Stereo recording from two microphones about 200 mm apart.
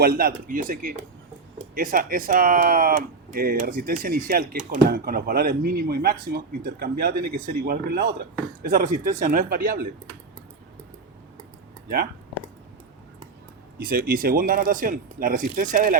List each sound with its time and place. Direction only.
0.0 s speech: 50° right (ahead or behind)
13.7 s speech: 50° right (ahead or behind)